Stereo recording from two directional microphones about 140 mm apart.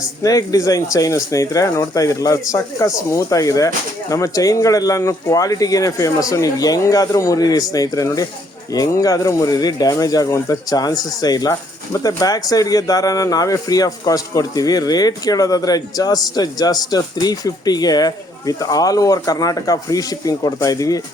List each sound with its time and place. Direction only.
0.2 s speech: 25° left (ahead or behind)